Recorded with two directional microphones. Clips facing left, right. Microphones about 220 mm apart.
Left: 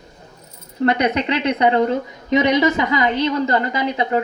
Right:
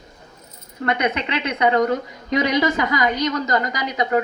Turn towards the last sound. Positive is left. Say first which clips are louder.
# left 2 dB
turn(degrees=30)  # may be behind; listen again after turning